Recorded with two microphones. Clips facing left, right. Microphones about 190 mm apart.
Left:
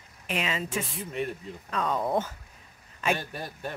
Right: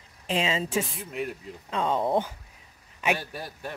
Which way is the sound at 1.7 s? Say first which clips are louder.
Right 2 dB; 25° right (ahead or behind).